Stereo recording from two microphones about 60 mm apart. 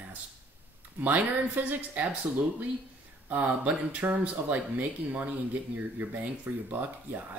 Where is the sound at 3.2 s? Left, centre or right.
Right.